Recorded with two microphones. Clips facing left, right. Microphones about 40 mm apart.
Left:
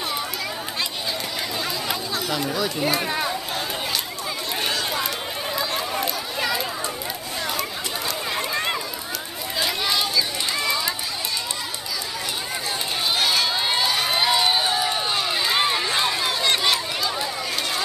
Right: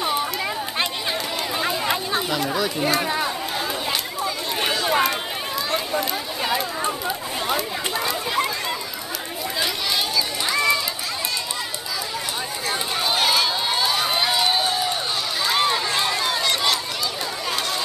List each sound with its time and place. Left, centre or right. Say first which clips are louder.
0.0 s chatter: right 4 dB; centre
1.6 s a sound: right 6 dB; right
2.5 s speech: right 2 dB; centre
4.6 s run: right 3 dB; centre
6.4 s a sound: right 2 dB; right
10.1 s run: right 2 dB; centre
13.1 s run: right 2 dB; centre
13.5 s crowd: even; centre
15.4 s run: right 3 dB; centre
16.4 s a sound: left 3 dB; centre